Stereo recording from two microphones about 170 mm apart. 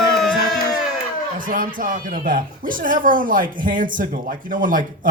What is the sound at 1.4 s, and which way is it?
Speech, 50° right (ahead or behind).